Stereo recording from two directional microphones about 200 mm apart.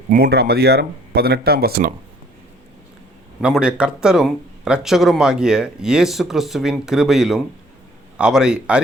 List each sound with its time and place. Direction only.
0.1 s speech: 50° right (ahead or behind)
3.4 s speech: 5° right (ahead or behind)